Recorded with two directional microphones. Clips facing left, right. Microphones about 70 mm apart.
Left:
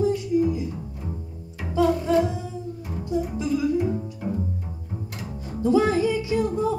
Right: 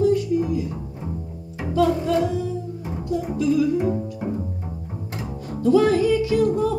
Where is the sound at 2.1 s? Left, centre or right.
Left.